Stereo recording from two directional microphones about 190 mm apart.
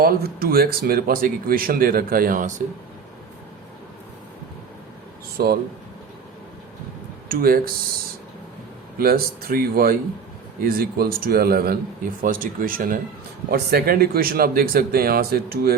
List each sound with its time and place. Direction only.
0.0 s speech: 50° right (ahead or behind)
5.4 s speech: 55° right (ahead or behind)
7.3 s speech: 50° right (ahead or behind)
9.0 s speech: 50° right (ahead or behind)